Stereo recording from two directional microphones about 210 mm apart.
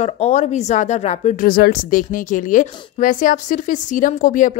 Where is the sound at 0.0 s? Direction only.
30° left (ahead or behind).